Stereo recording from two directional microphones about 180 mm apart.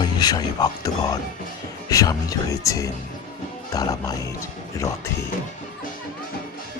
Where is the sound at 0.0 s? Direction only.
20° left (ahead or behind).